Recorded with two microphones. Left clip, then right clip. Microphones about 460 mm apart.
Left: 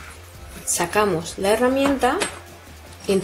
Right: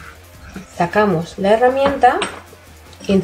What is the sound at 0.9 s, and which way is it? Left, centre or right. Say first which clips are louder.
Speech: right 4 dB; left.